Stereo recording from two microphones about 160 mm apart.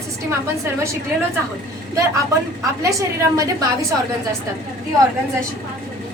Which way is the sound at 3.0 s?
20° right (ahead or behind).